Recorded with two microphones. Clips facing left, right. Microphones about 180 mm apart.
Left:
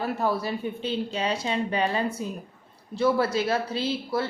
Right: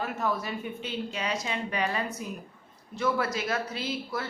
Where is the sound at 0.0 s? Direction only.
35° left (ahead or behind).